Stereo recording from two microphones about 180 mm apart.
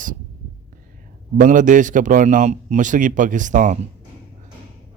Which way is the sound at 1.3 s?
45° right (ahead or behind).